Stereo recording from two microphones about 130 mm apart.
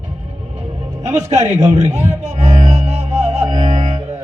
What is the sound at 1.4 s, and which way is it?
Speech, 25° right (ahead or behind).